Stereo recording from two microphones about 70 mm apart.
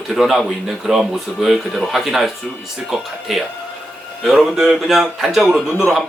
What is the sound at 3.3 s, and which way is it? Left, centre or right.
Speech, centre.